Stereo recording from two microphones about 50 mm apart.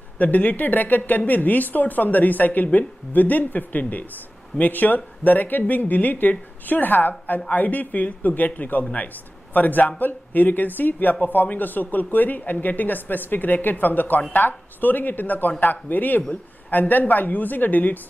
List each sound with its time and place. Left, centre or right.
0.2 s speech: left